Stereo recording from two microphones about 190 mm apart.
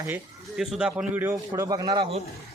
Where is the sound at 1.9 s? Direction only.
30° right (ahead or behind).